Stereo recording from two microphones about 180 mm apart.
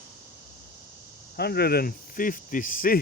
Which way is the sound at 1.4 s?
60° left (ahead or behind).